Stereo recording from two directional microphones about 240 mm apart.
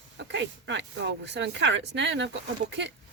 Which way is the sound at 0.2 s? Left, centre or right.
Right.